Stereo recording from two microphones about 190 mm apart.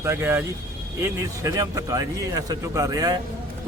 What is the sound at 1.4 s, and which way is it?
A man's voice, 15° right (ahead or behind).